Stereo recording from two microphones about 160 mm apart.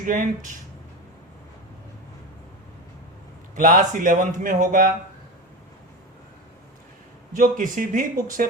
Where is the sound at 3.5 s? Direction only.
55° right (ahead or behind).